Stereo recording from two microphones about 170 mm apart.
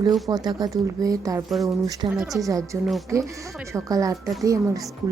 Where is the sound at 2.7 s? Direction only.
15° right (ahead or behind).